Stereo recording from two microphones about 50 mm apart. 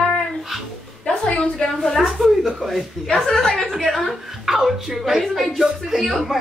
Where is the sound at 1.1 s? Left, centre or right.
Centre.